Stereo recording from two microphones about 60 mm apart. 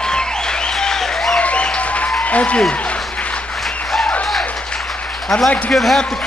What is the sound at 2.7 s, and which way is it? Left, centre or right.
Applause, left.